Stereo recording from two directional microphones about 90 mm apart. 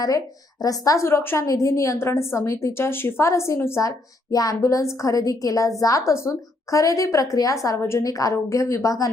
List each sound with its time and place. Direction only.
0.6 s a woman's voice: 40° left (ahead or behind)